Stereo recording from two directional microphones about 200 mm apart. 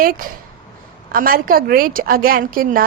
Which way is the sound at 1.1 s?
45° right (ahead or behind).